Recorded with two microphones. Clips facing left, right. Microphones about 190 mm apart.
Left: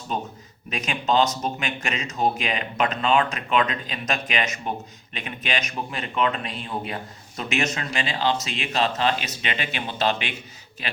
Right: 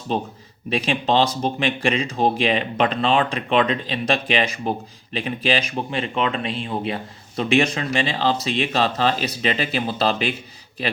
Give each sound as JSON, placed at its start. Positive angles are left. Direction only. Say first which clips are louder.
{"t": 0.7, "sound": "speech", "louder": "right 4 dB", "side_deg": -30}